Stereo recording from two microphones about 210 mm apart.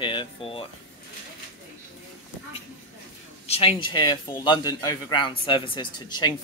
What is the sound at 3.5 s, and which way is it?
A man's voice, 25° left (ahead or behind).